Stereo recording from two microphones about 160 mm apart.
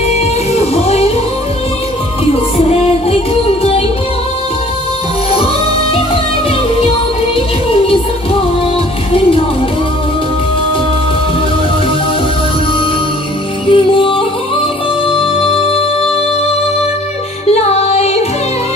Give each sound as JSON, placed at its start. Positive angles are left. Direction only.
{"t": 0.1, "sound": "music", "side_deg": 40}
{"t": 2.5, "sound": "music", "side_deg": 40}
{"t": 7.3, "sound": "music", "side_deg": 35}
{"t": 13.7, "sound": "music", "side_deg": 30}
{"t": 17.5, "sound": "music", "side_deg": 40}